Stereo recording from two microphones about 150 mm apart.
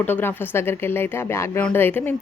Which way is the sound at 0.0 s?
15° left (ahead or behind).